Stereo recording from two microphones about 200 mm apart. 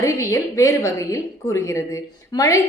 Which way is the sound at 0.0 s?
15° left (ahead or behind).